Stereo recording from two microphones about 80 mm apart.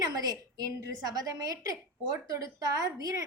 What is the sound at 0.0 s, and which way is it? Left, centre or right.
A woman's voice, right.